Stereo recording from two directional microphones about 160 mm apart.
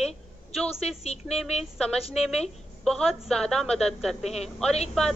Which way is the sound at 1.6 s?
5° left (ahead or behind).